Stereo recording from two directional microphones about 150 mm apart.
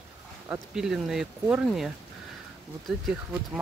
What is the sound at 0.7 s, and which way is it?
Speech, 5° right (ahead or behind).